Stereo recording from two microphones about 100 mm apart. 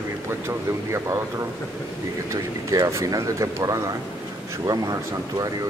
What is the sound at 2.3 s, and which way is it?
Speech, 35° right (ahead or behind).